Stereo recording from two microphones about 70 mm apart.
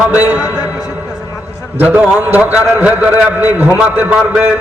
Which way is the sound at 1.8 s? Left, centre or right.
Right.